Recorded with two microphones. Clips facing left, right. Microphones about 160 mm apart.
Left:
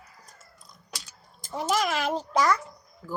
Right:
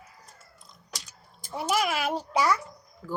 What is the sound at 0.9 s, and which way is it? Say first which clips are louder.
A child's voice: even; 10° right (ahead or behind).